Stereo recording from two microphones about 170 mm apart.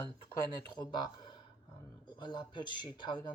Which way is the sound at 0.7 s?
25° left (ahead or behind).